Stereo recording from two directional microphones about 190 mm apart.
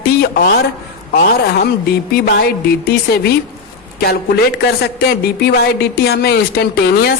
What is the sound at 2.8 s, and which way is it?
A woman's voice, 60° left (ahead or behind).